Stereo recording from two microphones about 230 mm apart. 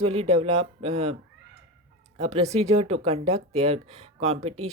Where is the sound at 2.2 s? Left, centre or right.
Right.